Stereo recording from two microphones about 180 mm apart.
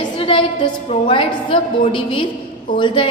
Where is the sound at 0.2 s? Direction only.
30° left (ahead or behind).